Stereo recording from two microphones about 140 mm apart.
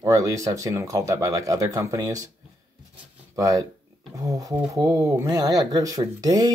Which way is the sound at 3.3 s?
25° right (ahead or behind).